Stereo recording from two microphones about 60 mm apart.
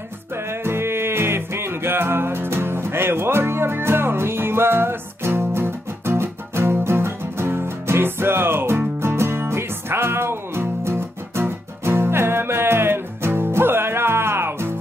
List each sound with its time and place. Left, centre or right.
0.5 s music: right